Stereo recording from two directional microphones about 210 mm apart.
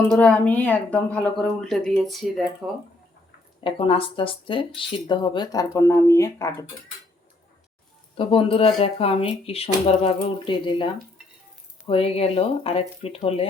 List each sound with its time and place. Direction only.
0.1 s speech: 5° left (ahead or behind)
3.6 s speech: 25° left (ahead or behind)
8.1 s speech: 25° left (ahead or behind)